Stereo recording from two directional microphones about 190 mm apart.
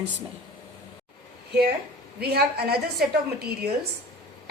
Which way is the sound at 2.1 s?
55° right (ahead or behind).